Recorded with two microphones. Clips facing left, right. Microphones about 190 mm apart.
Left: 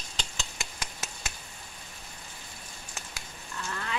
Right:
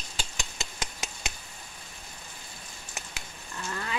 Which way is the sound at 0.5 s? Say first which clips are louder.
Right 2 dB; 20° right (ahead or behind).